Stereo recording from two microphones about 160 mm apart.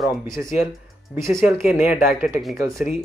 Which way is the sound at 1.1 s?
15° right (ahead or behind).